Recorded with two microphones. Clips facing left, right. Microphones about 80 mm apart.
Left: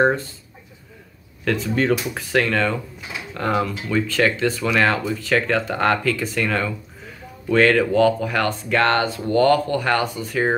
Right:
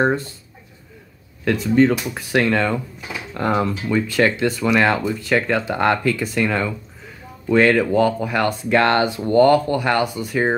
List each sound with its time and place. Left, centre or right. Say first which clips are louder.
1.4 s speech: right 5 dB; centre
2.3 s speech: right 2 dB; centre